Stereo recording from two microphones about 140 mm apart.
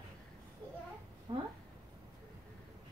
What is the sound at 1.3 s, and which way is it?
Speech, 30° right (ahead or behind).